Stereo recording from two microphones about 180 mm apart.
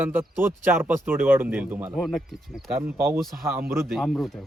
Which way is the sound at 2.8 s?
15° right (ahead or behind).